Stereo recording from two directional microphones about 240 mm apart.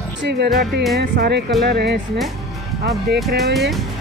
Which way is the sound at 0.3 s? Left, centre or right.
Right.